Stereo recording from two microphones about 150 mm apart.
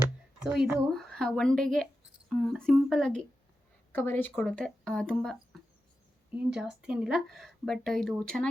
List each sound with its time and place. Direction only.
0.4 s a woman's voice: centre (ahead or behind)
6.5 s a woman's voice: 5° right (ahead or behind)